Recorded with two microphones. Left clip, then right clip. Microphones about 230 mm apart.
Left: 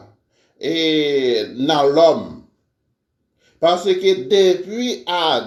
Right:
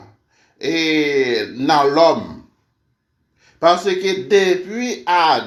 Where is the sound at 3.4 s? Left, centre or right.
Centre.